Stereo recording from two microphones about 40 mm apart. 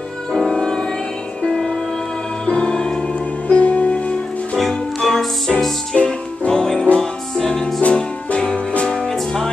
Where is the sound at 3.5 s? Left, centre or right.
Left.